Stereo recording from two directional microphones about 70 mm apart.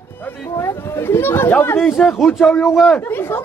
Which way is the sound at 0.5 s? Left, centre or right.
Left.